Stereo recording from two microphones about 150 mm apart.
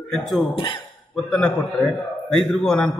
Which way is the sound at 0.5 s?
35° left (ahead or behind).